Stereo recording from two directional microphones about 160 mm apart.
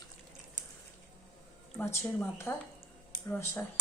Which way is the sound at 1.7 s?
15° left (ahead or behind).